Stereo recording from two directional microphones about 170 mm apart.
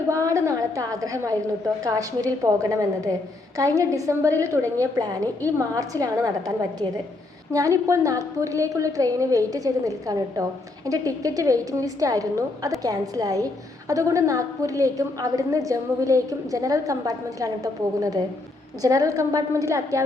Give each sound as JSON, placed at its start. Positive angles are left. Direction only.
{"t": 0.1, "sound": "a woman's voice", "side_deg": -20}
{"t": 7.5, "sound": "a woman's voice", "side_deg": -20}